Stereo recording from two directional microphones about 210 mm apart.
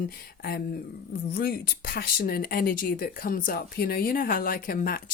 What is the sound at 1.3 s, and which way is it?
Speech, 45° left (ahead or behind).